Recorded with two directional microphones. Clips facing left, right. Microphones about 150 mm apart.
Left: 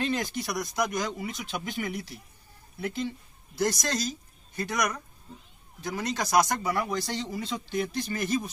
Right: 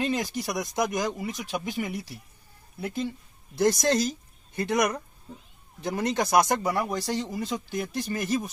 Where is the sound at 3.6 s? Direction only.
55° right (ahead or behind).